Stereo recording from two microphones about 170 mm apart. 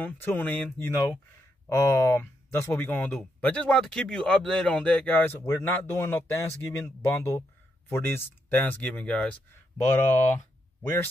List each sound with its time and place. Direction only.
0.0 s speech: 10° left (ahead or behind)
10.8 s speech: 15° left (ahead or behind)